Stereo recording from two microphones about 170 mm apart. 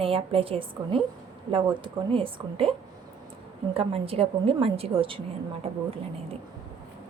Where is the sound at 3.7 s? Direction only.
35° right (ahead or behind).